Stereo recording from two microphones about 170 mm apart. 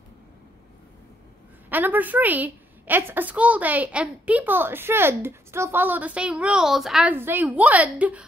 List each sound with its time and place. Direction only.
1.7 s a woman's voice: 10° right (ahead or behind)